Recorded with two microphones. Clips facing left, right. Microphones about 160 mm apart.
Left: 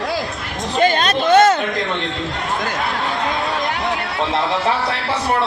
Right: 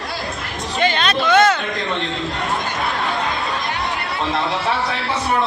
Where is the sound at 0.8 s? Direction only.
40° left (ahead or behind).